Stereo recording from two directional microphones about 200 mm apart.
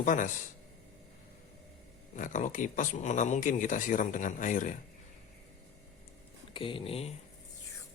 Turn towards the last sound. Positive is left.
turn(degrees=30)  # may be behind; listen again after turning